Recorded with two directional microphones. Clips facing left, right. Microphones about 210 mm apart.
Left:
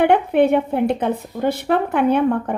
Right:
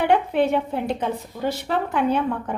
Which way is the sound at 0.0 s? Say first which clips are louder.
Left 5 dB; 60° left (ahead or behind).